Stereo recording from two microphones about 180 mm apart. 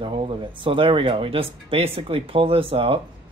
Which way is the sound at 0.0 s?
30° right (ahead or behind).